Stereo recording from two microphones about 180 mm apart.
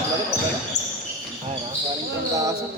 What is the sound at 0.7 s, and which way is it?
Basketball bounce, 65° left (ahead or behind).